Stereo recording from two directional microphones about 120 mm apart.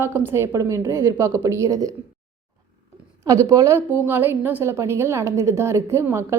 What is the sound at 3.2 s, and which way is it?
A woman's voice, 30° right (ahead or behind).